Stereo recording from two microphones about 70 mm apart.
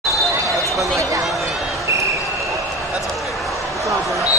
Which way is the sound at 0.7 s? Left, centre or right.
Right.